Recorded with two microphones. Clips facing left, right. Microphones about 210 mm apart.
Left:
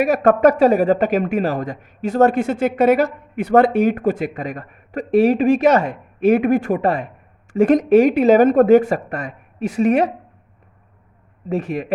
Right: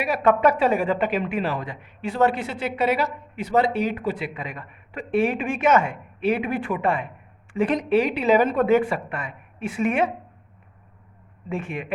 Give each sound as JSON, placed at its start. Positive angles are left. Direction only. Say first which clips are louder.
{"t": 0.0, "sound": "speech", "louder": "left 6 dB", "side_deg": 45}
{"t": 11.4, "sound": "speech", "louder": "left 7 dB", "side_deg": 40}